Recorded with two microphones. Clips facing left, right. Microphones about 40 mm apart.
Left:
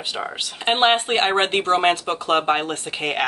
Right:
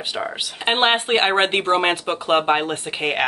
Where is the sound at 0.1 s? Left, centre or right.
Centre.